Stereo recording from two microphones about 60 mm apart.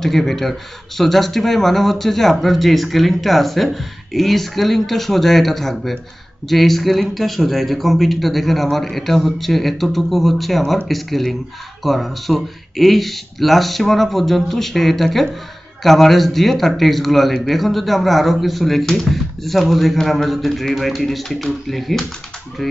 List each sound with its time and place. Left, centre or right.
0.0 s speech: centre